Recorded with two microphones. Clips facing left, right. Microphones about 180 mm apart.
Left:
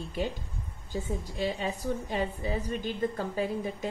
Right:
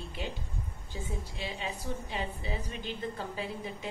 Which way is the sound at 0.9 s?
40° left (ahead or behind).